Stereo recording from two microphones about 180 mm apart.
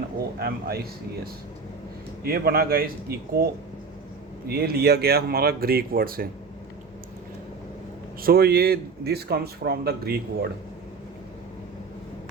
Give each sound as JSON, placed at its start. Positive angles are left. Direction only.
{"t": 0.3, "sound": "speech", "side_deg": -60}
{"t": 8.2, "sound": "speech", "side_deg": -60}